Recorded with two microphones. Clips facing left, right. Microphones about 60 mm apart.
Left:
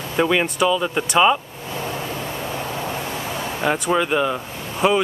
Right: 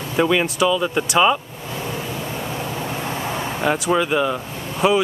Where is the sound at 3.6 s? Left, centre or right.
Centre.